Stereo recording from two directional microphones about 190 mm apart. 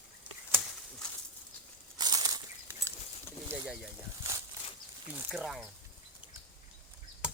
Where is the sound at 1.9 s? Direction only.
20° right (ahead or behind).